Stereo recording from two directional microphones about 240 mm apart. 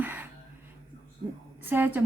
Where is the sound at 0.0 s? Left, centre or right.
Centre.